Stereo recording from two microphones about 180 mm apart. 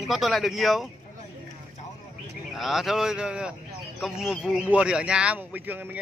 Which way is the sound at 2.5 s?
Centre (ahead or behind).